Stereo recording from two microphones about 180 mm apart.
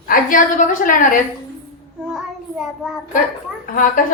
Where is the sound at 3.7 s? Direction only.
45° left (ahead or behind).